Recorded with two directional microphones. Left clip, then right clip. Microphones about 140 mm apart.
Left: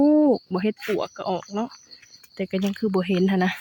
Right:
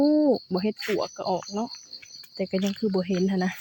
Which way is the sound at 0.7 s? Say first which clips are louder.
Left 1 dB; centre (ahead or behind).